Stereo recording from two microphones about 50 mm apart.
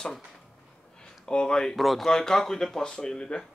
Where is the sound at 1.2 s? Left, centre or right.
Centre.